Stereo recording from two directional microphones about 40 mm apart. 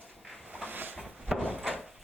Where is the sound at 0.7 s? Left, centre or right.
Right.